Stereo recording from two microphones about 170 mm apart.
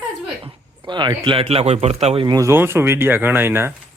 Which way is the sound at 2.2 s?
20° right (ahead or behind).